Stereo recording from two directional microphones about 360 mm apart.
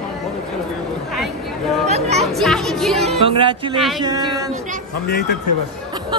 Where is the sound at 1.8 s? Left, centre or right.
Centre.